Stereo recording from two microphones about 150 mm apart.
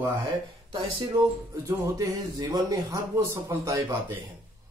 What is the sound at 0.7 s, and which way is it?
Speech, 30° right (ahead or behind).